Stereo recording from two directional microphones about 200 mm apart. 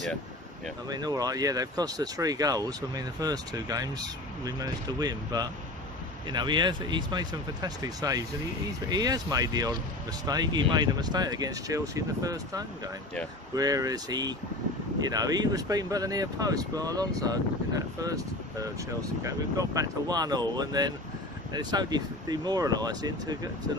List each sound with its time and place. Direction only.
0.8 s speech: 20° right (ahead or behind)